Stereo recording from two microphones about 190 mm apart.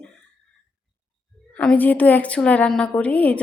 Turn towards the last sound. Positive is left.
turn(degrees=10)  # may be behind; listen again after turning